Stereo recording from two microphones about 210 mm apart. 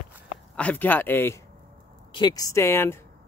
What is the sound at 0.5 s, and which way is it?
Speech, 5° left (ahead or behind).